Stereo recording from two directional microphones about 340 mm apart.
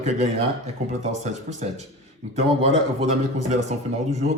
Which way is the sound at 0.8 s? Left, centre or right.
Centre.